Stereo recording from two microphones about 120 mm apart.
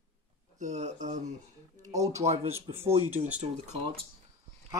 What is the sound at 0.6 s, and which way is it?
Speech, 80° right.